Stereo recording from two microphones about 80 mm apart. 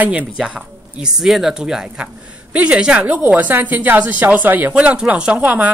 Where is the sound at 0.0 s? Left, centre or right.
Right.